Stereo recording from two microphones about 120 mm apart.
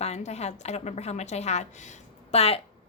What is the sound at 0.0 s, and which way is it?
A woman's voice, 65° left (ahead or behind).